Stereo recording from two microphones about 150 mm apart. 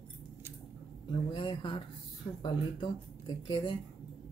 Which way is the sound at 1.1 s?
35° left (ahead or behind).